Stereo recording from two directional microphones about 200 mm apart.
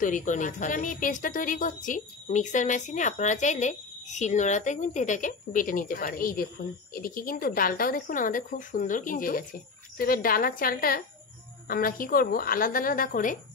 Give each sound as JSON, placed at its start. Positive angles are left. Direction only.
{"t": 0.0, "sound": "a woman's voice", "side_deg": 40}